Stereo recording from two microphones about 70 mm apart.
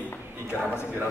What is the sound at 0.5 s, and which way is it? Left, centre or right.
Speech, left.